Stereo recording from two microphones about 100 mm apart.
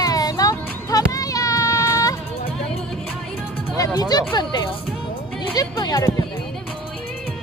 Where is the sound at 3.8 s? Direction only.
40° left (ahead or behind).